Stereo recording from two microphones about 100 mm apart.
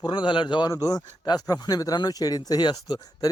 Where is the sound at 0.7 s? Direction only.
35° left (ahead or behind).